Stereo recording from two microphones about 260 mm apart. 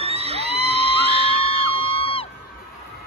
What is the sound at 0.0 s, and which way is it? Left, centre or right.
Music, right.